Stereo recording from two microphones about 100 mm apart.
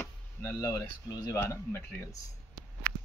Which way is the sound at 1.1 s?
45° left (ahead or behind).